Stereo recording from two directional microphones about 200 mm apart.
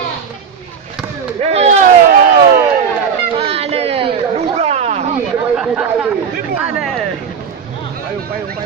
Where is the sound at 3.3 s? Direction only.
30° right (ahead or behind).